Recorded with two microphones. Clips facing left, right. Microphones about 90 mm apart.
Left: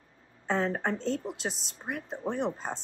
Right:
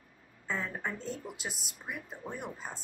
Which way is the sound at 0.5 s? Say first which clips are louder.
Left 7 dB; 80° left.